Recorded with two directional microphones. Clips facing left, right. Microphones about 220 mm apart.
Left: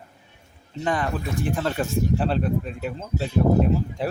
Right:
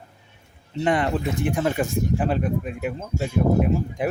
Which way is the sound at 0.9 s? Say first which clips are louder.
Right 3 dB; 20° right (ahead or behind).